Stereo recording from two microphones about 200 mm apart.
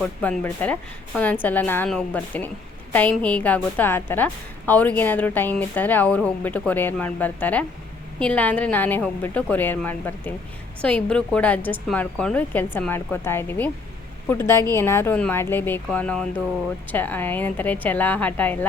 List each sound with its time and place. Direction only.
0.0 s a woman's voice: 5° left (ahead or behind)